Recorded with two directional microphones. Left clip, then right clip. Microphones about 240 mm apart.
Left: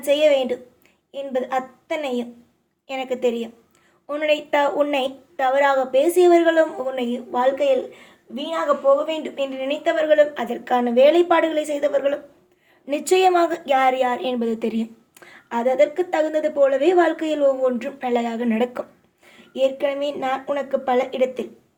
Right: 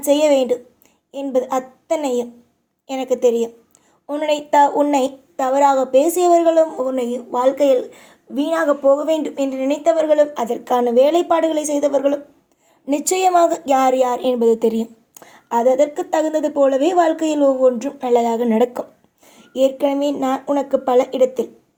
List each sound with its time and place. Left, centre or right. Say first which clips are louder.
0.0 s a woman's voice: right 2 dB; right